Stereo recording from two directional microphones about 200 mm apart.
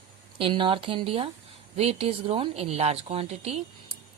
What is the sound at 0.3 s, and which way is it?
A woman's voice, 25° right (ahead or behind).